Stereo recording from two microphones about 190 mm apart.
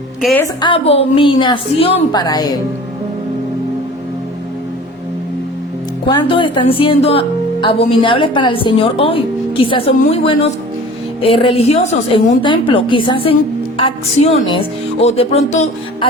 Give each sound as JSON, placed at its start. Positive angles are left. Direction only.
{"t": 0.6, "sound": "a woman's voice", "side_deg": 30}
{"t": 6.1, "sound": "a woman's voice", "side_deg": 25}